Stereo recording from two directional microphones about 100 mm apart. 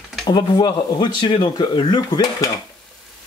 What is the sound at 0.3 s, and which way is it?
Speech, 45° left (ahead or behind).